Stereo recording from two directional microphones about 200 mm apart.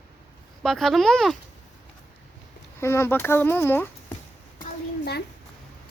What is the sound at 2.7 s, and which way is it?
Speech, 10° left (ahead or behind).